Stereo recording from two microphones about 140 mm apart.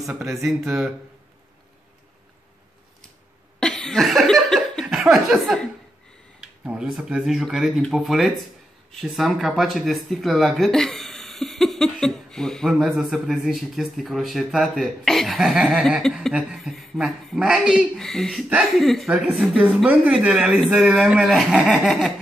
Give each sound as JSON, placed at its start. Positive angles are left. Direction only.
{"t": 0.1, "sound": "speech", "side_deg": -20}
{"t": 0.4, "sound": "speech", "side_deg": 0}
{"t": 3.5, "sound": "a sound", "side_deg": 5}
{"t": 6.4, "sound": "speech", "side_deg": -5}